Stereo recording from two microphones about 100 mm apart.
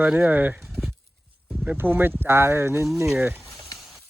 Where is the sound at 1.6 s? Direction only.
15° right (ahead or behind).